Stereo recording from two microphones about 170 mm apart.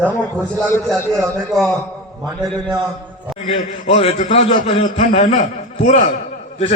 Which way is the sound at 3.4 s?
35° left (ahead or behind).